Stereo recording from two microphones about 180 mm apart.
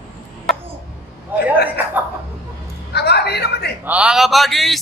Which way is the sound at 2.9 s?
65° left (ahead or behind).